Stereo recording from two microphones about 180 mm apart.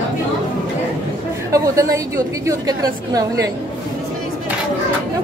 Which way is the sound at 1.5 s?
15° right (ahead or behind).